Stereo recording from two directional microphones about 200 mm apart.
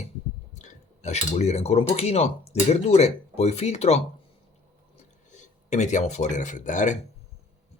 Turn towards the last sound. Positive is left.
turn(degrees=40)  # may be behind; listen again after turning